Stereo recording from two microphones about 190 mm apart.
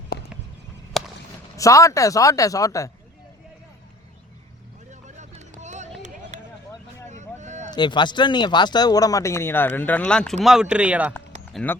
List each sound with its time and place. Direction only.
0.1 s a sound: 55° left (ahead or behind)
0.9 s fireworks: centre (ahead or behind)
1.5 s speech: 15° left (ahead or behind)
4.9 s vehicle: 40° right (ahead or behind)
6.3 s a sound: 40° right (ahead or behind)
7.1 s vehicle: 40° right (ahead or behind)
7.7 s speech: 25° left (ahead or behind); by 11.1 s 5° right (ahead or behind)
11.5 s speech: 10° left (ahead or behind)